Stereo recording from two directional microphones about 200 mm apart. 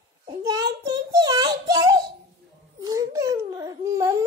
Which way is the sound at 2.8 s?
15° right (ahead or behind).